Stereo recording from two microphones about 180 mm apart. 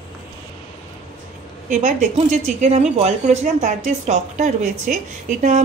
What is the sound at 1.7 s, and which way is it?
A woman's voice, 40° right (ahead or behind).